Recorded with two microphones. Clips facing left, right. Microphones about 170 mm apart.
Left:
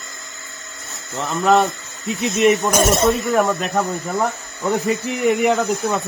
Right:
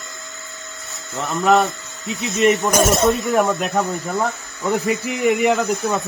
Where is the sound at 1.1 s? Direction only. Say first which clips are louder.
Even; centre (ahead or behind).